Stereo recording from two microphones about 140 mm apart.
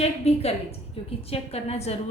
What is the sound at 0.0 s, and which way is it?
A woman's voice, 45° left (ahead or behind).